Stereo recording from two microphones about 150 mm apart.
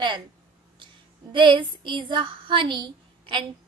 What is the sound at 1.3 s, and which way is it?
A woman's voice, 35° right (ahead or behind).